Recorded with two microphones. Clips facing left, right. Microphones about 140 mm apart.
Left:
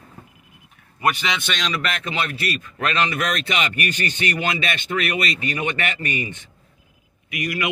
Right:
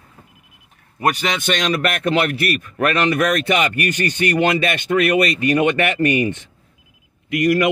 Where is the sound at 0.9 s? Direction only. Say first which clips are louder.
Right 3 dB; 45° right (ahead or behind).